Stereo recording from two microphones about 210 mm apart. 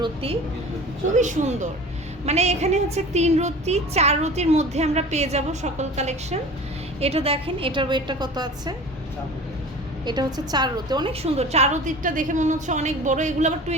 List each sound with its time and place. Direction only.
0.0 s a sound: 25° right (ahead or behind)
1.1 s a woman's voice: 35° right (ahead or behind); by 8.7 s 20° right (ahead or behind)
10.1 s a woman's voice: 20° right (ahead or behind); by 13.7 s 35° right (ahead or behind)